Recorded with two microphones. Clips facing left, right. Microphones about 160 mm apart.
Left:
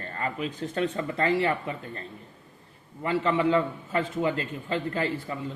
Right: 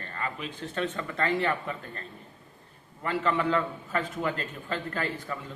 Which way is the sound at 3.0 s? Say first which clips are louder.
Left 3 dB; 25° left (ahead or behind).